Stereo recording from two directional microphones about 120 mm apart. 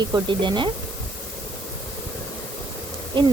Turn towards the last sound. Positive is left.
turn(degrees=-40)  # may be behind; listen again after turning